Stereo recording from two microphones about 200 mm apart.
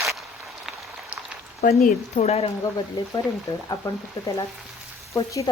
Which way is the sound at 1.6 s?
45° left (ahead or behind).